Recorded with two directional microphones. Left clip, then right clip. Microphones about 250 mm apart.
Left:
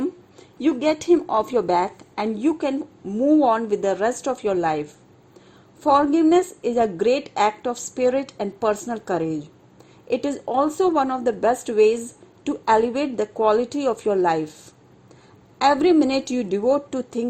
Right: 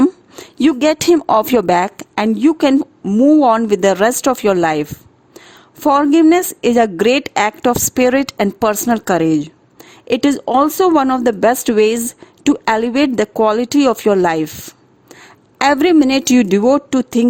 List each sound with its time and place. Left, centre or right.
0.0 s a woman's voice: right